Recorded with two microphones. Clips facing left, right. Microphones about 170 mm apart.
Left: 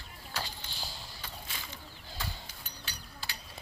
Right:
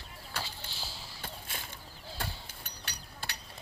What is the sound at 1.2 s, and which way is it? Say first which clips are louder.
Mechanisms: right 3 dB; 50° right (ahead or behind).